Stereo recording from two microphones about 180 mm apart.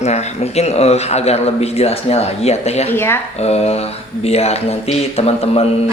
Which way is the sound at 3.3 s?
35° left (ahead or behind).